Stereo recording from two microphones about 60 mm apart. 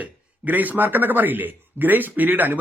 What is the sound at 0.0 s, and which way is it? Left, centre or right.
A man's voice, right.